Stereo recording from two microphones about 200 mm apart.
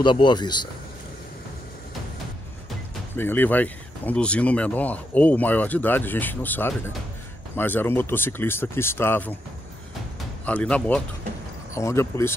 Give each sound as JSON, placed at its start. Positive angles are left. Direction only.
{"t": 0.0, "sound": "speech", "side_deg": 25}
{"t": 3.2, "sound": "speech", "side_deg": 10}
{"t": 10.4, "sound": "speech", "side_deg": 5}